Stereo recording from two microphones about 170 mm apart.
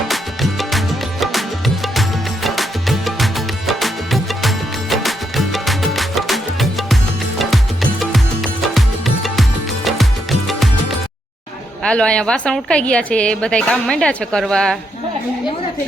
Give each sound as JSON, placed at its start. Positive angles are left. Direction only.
{"t": 0.1, "sound": "music", "side_deg": 0}
{"t": 11.8, "sound": "a woman's voice", "side_deg": 5}